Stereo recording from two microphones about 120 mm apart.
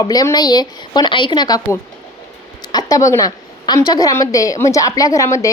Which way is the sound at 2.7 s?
30° left (ahead or behind).